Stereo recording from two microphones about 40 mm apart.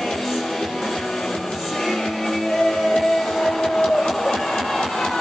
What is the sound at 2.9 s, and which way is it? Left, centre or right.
Music, centre.